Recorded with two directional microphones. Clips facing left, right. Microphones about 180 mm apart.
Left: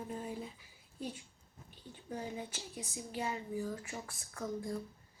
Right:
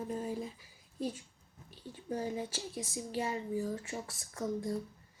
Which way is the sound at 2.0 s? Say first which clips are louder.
Right 5 dB; 35° right (ahead or behind).